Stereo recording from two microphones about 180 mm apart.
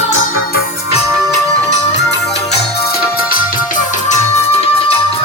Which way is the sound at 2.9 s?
55° left (ahead or behind).